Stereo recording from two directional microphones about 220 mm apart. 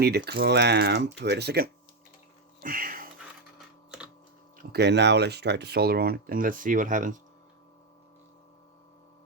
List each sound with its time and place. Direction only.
0.0 s speech: 45° right (ahead or behind)
2.6 s a sound: 40° right (ahead or behind)
4.5 s speech: 50° right (ahead or behind)